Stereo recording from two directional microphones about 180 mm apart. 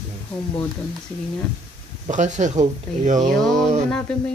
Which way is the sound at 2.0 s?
40° right (ahead or behind).